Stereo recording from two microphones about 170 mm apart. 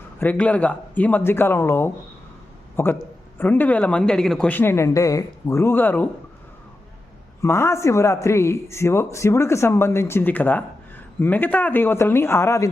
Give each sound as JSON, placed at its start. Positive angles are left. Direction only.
{"t": 0.2, "sound": "a man's voice", "side_deg": 10}
{"t": 7.4, "sound": "a man's voice", "side_deg": 15}